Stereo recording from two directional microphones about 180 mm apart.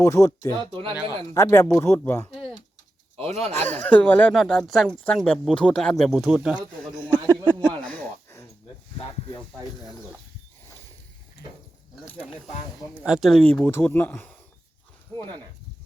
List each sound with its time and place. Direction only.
0.0 s speech: 20° left (ahead or behind)
0.7 s speech: 25° right (ahead or behind)
1.3 s speech: 15° left (ahead or behind)
3.2 s speech: 35° right (ahead or behind)
3.7 s speech: 10° left (ahead or behind)
7.3 s a sound: 15° right (ahead or behind)
7.8 s a sound: 10° left (ahead or behind)
13.0 s speech: 5° right (ahead or behind)